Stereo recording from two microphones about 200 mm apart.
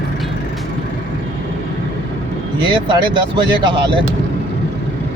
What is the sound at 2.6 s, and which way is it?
Speech, 25° right (ahead or behind).